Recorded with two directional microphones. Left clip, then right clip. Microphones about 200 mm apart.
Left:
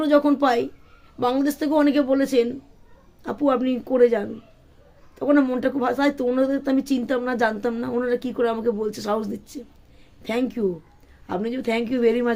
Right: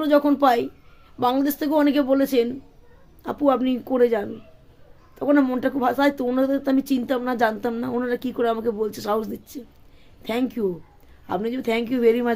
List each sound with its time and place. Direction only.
0.0 s speech: 5° right (ahead or behind)